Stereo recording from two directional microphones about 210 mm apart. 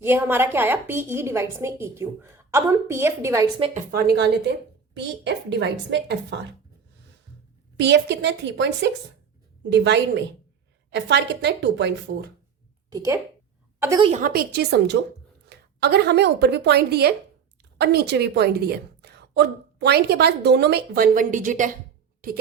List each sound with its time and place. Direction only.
0.0 s a woman's voice: 10° right (ahead or behind)
3.9 s a woman's voice: 50° right (ahead or behind)
7.8 s a woman's voice: 55° right (ahead or behind)
12.9 s a woman's voice: 15° right (ahead or behind)
14.1 s a woman's voice: 40° right (ahead or behind)